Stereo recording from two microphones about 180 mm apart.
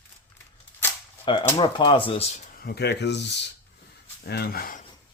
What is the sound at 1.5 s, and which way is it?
Speech, 25° left (ahead or behind).